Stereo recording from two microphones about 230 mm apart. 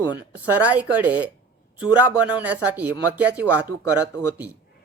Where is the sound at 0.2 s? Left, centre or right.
Centre.